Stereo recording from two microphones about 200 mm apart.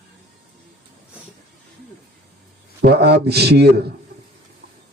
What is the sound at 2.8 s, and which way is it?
A man's voice, 55° right (ahead or behind).